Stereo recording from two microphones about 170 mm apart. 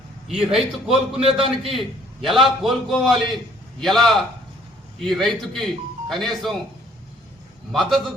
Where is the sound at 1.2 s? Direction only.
35° right (ahead or behind).